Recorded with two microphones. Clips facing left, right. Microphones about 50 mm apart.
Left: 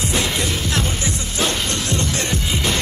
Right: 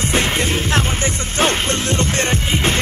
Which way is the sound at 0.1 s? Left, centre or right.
Right.